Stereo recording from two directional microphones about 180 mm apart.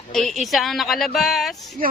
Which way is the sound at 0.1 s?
Centre (ahead or behind).